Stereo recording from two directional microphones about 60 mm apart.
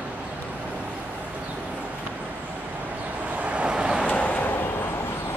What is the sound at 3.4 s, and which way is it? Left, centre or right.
Vehicle, right.